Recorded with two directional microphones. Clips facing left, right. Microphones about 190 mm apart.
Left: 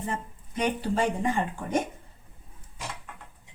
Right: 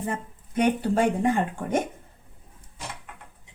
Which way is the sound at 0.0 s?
55° right (ahead or behind).